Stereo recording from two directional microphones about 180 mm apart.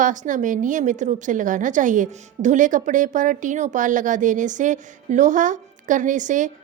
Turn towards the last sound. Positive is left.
turn(degrees=-45)  # may be behind; listen again after turning